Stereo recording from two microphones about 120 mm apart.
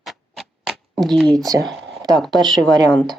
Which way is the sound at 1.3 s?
30° right (ahead or behind).